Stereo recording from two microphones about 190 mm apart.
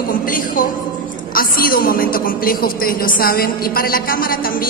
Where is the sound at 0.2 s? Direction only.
45° left (ahead or behind).